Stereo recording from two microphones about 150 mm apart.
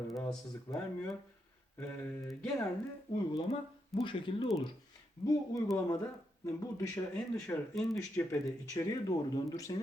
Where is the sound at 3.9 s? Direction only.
35° left (ahead or behind).